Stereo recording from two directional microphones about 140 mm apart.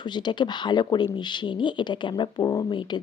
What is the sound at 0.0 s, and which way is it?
Speech, 35° left (ahead or behind).